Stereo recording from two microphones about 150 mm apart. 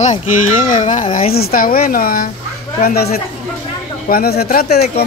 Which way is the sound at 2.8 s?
90° left.